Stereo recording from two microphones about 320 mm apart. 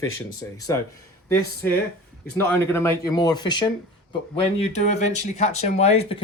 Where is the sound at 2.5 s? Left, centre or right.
Centre.